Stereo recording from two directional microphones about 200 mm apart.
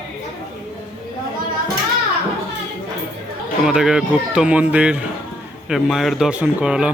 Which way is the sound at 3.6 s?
5° right (ahead or behind).